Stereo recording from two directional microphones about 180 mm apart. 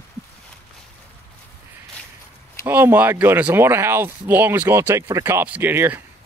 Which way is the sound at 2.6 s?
10° right (ahead or behind).